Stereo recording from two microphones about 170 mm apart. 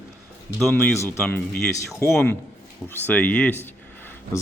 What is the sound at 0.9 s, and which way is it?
Speech, 15° left (ahead or behind).